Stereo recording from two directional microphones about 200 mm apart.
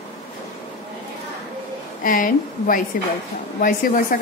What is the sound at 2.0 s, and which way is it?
Speech, 45° left (ahead or behind).